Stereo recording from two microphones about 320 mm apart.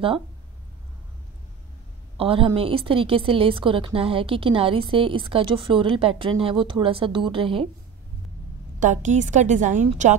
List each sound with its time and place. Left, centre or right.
2.1 s a woman's voice: centre
8.7 s a woman's voice: right